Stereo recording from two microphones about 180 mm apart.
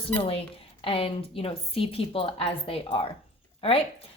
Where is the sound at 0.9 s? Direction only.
30° left (ahead or behind).